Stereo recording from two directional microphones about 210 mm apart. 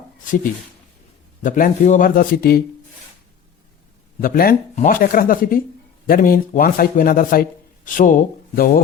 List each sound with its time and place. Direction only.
1.5 s speech: 40° left (ahead or behind)
4.2 s speech: 45° left (ahead or behind)